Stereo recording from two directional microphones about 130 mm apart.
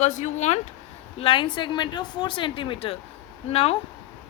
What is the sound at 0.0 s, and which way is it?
Speech, 65° left (ahead or behind).